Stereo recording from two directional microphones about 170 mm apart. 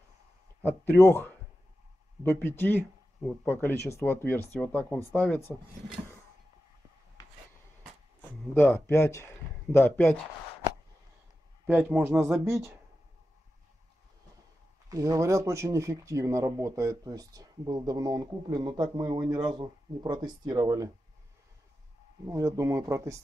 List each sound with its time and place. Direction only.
0.6 s speech: 15° left (ahead or behind)
8.2 s a man's voice: 10° left (ahead or behind)
11.6 s speech: 10° right (ahead or behind)
14.9 s speech: 20° right (ahead or behind)
22.2 s speech: 15° right (ahead or behind)